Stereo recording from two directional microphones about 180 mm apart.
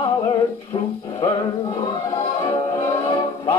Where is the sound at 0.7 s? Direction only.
25° left (ahead or behind).